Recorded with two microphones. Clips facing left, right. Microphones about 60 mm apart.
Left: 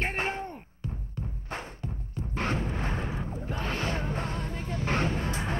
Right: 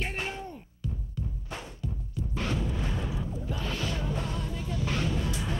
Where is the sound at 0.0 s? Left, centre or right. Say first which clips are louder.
Left 4 dB; left.